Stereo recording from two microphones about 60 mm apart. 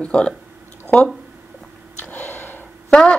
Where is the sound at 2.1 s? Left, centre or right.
Left.